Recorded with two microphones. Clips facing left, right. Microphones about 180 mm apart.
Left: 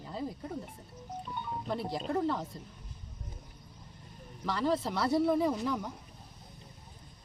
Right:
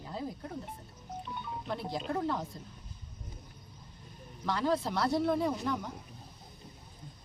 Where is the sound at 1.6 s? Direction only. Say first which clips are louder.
Left 1 dB; 5° left (ahead or behind).